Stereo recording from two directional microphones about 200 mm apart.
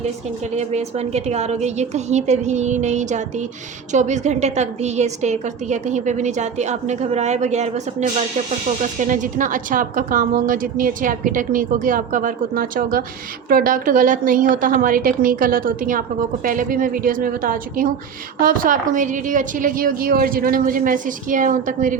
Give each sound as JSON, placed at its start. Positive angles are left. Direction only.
{"t": 0.5, "sound": "a woman's voice", "side_deg": -35}